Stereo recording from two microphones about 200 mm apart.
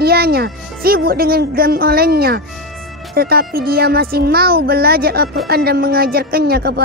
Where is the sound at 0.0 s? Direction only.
50° right (ahead or behind).